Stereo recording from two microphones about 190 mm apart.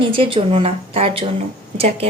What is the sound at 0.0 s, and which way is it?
A woman's voice, 30° right (ahead or behind).